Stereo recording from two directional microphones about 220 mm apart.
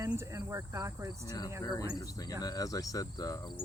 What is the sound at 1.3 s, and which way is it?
Speech, 15° left (ahead or behind).